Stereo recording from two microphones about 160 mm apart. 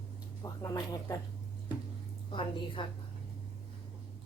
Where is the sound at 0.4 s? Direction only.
25° left (ahead or behind).